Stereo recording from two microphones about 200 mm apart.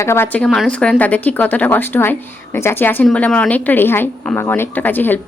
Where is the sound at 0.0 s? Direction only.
10° left (ahead or behind).